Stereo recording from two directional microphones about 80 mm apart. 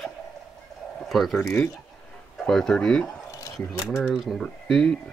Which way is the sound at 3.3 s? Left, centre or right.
Left.